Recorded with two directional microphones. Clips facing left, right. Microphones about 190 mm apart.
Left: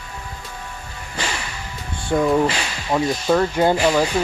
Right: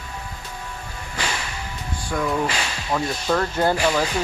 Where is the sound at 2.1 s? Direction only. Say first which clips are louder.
Left 7 dB; 25° left (ahead or behind).